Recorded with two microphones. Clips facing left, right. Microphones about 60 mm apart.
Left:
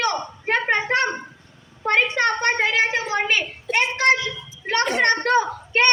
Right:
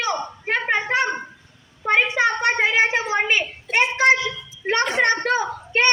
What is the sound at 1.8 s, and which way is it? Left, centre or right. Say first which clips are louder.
Speech: right 1 dB; centre.